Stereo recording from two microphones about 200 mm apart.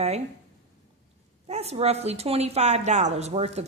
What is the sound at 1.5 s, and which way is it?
A woman's voice, 30° right (ahead or behind).